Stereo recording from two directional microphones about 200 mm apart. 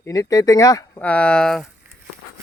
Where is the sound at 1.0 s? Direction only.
5° left (ahead or behind).